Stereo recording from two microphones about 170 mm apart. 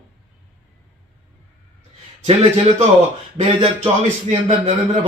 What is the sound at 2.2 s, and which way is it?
Speech, 30° right (ahead or behind).